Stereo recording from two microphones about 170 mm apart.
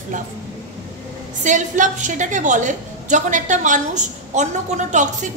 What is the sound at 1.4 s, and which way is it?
A woman's voice, 50° right (ahead or behind).